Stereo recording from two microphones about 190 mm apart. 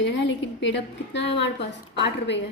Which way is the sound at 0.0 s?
70° left (ahead or behind).